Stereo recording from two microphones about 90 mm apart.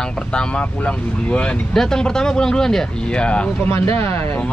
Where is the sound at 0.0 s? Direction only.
10° left (ahead or behind).